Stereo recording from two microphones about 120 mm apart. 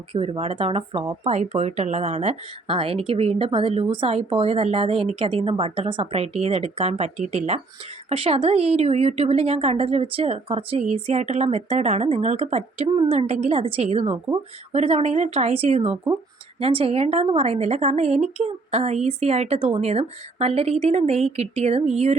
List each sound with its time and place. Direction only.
0.1 s a woman's voice: 55° right (ahead or behind)